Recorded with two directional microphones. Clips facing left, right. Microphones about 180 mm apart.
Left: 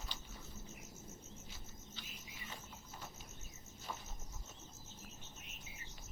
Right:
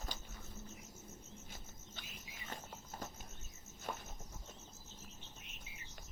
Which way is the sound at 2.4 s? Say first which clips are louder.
Right 5 dB; 45° right (ahead or behind).